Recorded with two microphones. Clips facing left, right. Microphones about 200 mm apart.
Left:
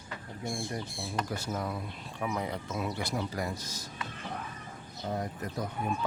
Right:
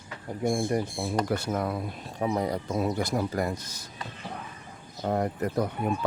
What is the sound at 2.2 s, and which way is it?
Speech, 35° right (ahead or behind).